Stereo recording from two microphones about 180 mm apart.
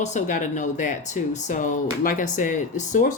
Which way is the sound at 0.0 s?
40° left (ahead or behind).